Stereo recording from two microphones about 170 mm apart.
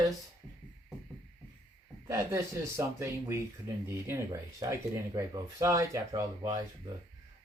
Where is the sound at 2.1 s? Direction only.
15° right (ahead or behind).